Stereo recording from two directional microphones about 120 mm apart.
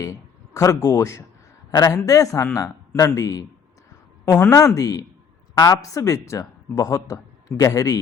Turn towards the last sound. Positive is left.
turn(degrees=30)  # may be behind; listen again after turning